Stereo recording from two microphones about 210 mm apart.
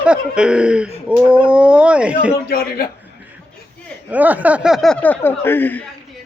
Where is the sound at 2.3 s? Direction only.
45° left (ahead or behind).